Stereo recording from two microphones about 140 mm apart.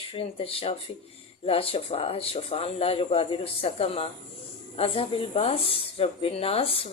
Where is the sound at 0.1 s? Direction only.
40° left (ahead or behind).